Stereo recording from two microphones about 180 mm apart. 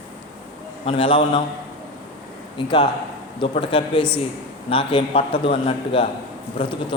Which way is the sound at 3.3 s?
30° left (ahead or behind).